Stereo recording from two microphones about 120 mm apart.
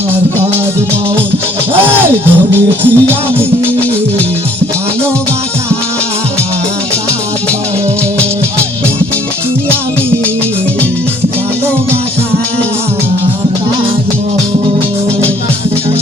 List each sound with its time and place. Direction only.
2.8 s music: 15° right (ahead or behind)